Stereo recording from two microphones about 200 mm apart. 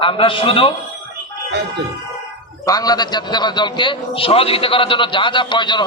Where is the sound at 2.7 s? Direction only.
20° left (ahead or behind).